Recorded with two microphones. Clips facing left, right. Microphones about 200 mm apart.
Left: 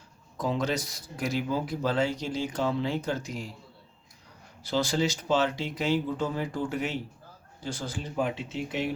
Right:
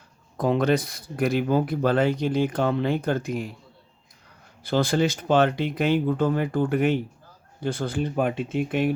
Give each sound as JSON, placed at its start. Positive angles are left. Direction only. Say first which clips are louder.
{"t": 0.3, "sound": "speech", "louder": "right 7 dB", "side_deg": -60}
{"t": 4.6, "sound": "speech", "louder": "right 5 dB", "side_deg": -55}